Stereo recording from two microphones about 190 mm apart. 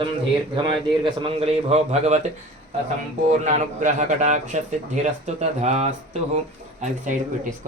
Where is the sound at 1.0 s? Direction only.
25° right (ahead or behind).